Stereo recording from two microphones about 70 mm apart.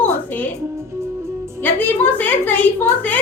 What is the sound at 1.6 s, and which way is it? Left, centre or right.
A woman's voice, left.